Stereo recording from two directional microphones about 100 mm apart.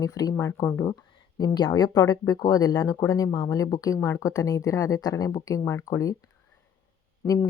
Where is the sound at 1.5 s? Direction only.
45° left (ahead or behind).